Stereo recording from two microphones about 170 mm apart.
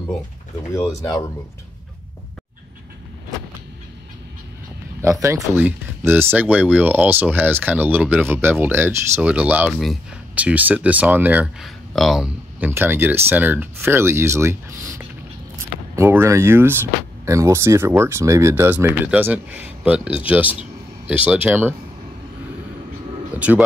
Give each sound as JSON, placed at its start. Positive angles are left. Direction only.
{"t": 0.7, "sound": "speech", "side_deg": 20}
{"t": 5.0, "sound": "speech", "side_deg": -15}
{"t": 11.9, "sound": "speech", "side_deg": 0}
{"t": 12.5, "sound": "speech", "side_deg": -10}
{"t": 21.5, "sound": "speech", "side_deg": -10}
{"t": 23.3, "sound": "music", "side_deg": -10}